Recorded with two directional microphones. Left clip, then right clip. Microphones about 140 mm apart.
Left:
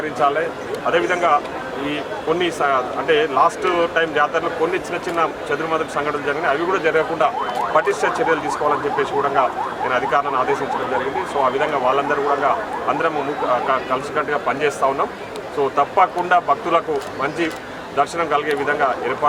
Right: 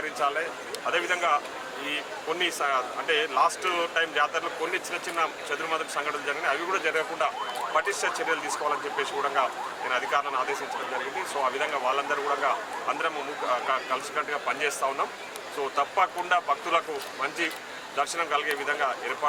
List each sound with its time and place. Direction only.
0.2 s speech: 10° left (ahead or behind)
7.9 s speech: 5° left (ahead or behind)
8.6 s speech: 15° left (ahead or behind)